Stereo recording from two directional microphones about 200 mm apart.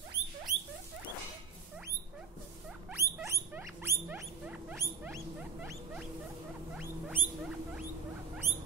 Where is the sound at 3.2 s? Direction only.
15° right (ahead or behind).